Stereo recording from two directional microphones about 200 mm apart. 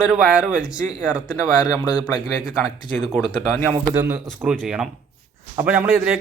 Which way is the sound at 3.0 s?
Centre (ahead or behind).